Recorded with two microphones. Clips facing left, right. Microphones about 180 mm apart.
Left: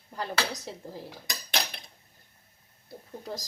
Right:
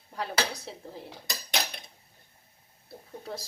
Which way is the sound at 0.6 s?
Centre (ahead or behind).